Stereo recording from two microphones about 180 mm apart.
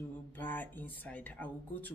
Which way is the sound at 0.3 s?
10° left (ahead or behind).